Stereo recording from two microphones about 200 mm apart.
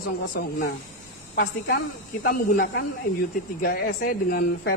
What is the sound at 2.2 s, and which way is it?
A woman's voice, 50° left (ahead or behind).